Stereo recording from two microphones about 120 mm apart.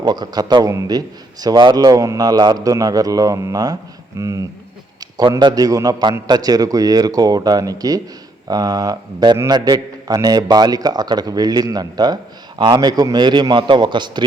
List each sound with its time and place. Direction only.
0.0 s a man's voice: 35° right (ahead or behind)